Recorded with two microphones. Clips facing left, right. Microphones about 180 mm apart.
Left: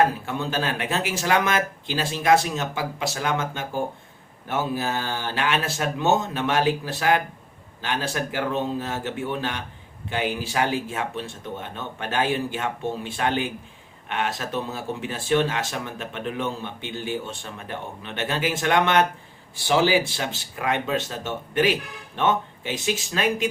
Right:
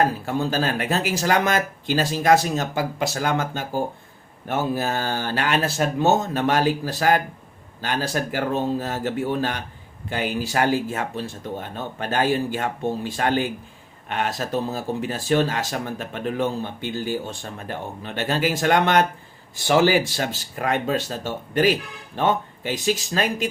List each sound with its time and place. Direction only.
0.0 s speech: 40° right (ahead or behind)
4.4 s speech: 45° right (ahead or behind)
19.6 s speech: 50° right (ahead or behind)